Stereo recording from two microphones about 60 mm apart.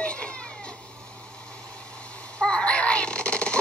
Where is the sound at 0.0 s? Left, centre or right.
Centre.